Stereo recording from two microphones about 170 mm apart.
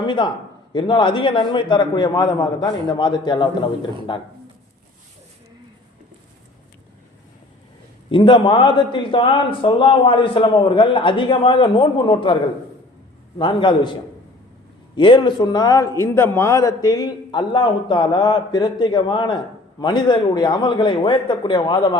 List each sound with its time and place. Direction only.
0.0 s a man's voice: 30° left (ahead or behind)
8.1 s a man's voice: 30° left (ahead or behind)
13.4 s a man's voice: 30° left (ahead or behind)
14.9 s a man's voice: 30° left (ahead or behind)